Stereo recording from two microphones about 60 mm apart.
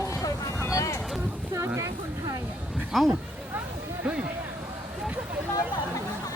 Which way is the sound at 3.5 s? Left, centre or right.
Right.